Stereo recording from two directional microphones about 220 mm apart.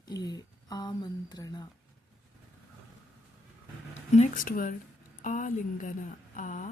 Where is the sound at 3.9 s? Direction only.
30° left (ahead or behind).